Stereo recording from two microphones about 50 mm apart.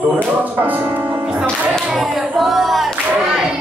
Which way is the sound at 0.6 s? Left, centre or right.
Right.